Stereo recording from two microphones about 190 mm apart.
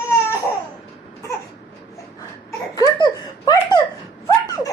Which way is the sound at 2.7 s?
20° left (ahead or behind).